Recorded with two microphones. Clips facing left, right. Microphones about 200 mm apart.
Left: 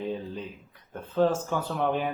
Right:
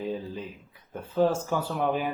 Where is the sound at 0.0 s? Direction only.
Centre (ahead or behind).